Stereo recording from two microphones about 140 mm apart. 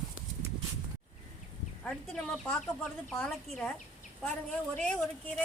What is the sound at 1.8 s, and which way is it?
A woman's voice, 5° left (ahead or behind).